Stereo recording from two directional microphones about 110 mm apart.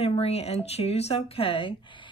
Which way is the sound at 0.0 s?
65° left (ahead or behind).